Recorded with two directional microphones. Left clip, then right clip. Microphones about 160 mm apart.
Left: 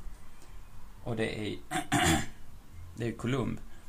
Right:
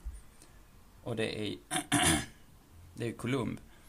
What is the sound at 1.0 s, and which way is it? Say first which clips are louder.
Speech: left 1 dB; 40° right (ahead or behind).